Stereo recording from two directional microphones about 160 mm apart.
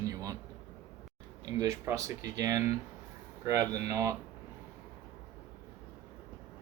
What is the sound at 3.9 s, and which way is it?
Speech, 20° right (ahead or behind).